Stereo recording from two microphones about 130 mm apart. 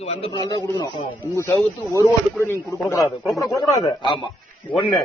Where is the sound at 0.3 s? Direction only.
30° left (ahead or behind).